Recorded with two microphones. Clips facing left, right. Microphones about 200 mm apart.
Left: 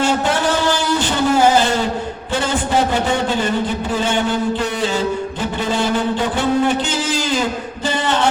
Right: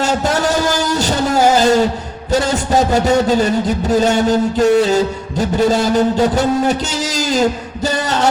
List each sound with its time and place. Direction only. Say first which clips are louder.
0.0 s music: right 1 dB; 40° right (ahead or behind)
2.3 s a sound: right 4 dB; 40° right (ahead or behind)
7.9 s chant: right 1 dB; 40° right (ahead or behind)